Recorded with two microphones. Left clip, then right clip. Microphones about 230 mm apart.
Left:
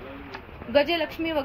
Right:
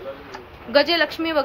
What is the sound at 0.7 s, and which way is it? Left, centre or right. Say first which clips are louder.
Speech: right 5 dB; centre.